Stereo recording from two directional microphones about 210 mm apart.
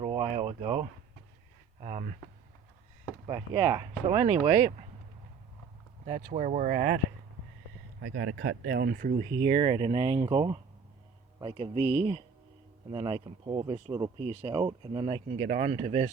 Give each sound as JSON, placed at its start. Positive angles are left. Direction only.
{"t": 0.0, "sound": "a sound", "side_deg": -25}
{"t": 1.8, "sound": "speech", "side_deg": -35}
{"t": 3.2, "sound": "speech", "side_deg": -25}
{"t": 6.1, "sound": "speech", "side_deg": -35}
{"t": 8.0, "sound": "speech", "side_deg": -55}
{"t": 9.4, "sound": "speech", "side_deg": -30}
{"t": 12.9, "sound": "speech", "side_deg": -25}
{"t": 15.0, "sound": "speech", "side_deg": -35}